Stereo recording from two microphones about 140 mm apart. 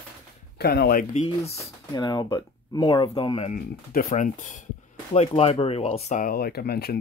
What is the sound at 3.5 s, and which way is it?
Speech, 65° left (ahead or behind).